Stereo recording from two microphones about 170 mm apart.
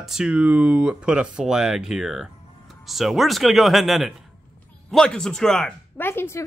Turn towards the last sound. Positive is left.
turn(degrees=15)  # may be behind; listen again after turning